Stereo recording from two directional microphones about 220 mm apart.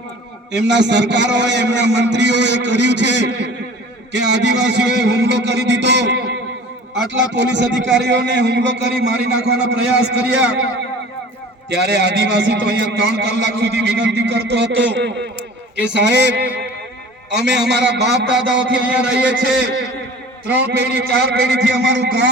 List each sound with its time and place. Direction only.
0.7 s a man's voice: 55° right (ahead or behind)
11.7 s a man's voice: 50° right (ahead or behind)
20.7 s a man's voice: 50° right (ahead or behind)